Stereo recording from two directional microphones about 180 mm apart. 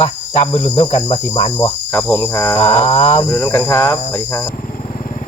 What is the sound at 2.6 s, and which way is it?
Cricket, 30° left (ahead or behind).